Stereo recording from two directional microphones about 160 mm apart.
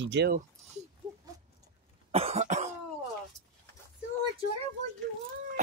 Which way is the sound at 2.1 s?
40° right (ahead or behind).